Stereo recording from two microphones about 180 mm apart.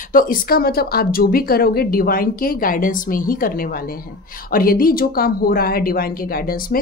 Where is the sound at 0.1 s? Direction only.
50° left (ahead or behind).